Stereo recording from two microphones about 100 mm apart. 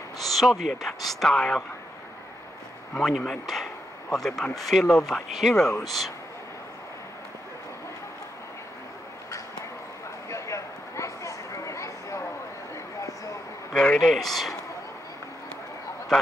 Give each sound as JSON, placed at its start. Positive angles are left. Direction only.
{"t": 0.2, "sound": "speech", "side_deg": 0}
{"t": 2.9, "sound": "speech", "side_deg": 5}
{"t": 10.3, "sound": "a sound", "side_deg": 30}
{"t": 13.7, "sound": "speech", "side_deg": 5}